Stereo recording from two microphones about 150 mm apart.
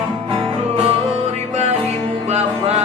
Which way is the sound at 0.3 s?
40° right (ahead or behind).